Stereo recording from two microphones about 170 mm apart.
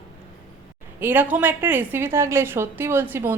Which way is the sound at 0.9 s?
10° right (ahead or behind).